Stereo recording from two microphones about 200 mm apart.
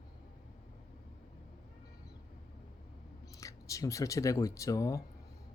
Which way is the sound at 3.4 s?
15° left (ahead or behind).